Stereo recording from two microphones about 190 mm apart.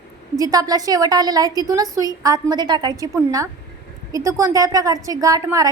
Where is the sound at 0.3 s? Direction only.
20° right (ahead or behind).